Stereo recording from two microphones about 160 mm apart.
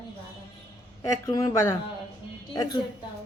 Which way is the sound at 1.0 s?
20° left (ahead or behind).